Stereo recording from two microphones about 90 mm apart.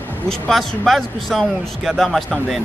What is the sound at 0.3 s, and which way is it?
A man's voice, centre (ahead or behind).